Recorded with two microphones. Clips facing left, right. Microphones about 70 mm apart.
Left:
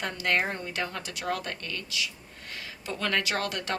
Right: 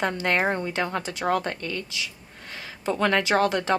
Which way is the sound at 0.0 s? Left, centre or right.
Right.